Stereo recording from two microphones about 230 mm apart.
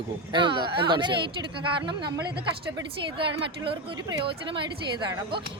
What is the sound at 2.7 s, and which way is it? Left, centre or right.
Speech, right.